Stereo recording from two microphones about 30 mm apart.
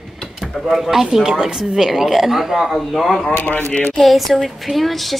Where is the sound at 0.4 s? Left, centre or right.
Centre.